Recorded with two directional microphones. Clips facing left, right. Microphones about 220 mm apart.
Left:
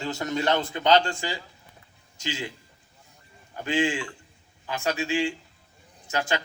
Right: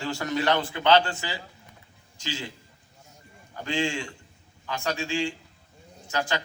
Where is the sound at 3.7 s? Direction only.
20° left (ahead or behind).